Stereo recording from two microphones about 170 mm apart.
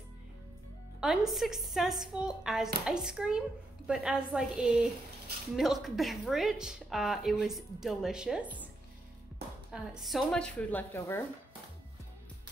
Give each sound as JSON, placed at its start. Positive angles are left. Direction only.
{"t": 1.0, "sound": "a woman's voice", "side_deg": 0}
{"t": 9.7, "sound": "speech", "side_deg": 0}